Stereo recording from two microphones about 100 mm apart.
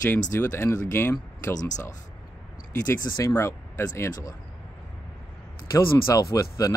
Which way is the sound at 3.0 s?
35° left (ahead or behind).